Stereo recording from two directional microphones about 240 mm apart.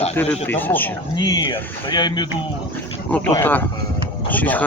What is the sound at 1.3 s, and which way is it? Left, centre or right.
Speech, centre.